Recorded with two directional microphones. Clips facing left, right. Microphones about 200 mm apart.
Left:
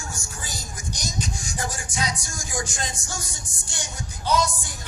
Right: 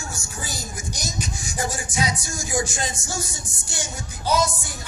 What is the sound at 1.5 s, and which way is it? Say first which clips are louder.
Music: right 5 dB; 10° right (ahead or behind).